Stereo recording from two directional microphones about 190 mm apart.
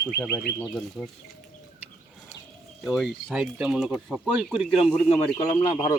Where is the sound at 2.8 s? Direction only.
Centre (ahead or behind).